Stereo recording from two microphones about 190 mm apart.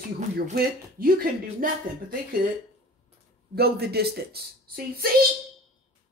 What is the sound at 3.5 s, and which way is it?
Speech, 55° right (ahead or behind).